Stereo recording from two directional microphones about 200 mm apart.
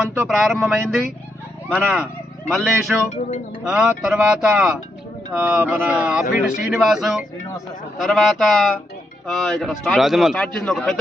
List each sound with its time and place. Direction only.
0.0 s a man's voice: centre (ahead or behind)
6.2 s speech: 40° left (ahead or behind)
6.6 s a man's voice: centre (ahead or behind)